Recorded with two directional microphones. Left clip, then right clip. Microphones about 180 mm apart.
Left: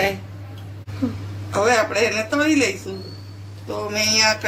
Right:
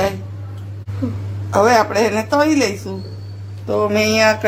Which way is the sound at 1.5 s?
55° right (ahead or behind).